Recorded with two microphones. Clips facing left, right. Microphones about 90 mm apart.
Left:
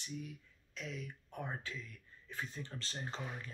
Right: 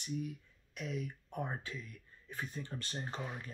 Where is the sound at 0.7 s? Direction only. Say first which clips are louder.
Right 5 dB; 15° right (ahead or behind).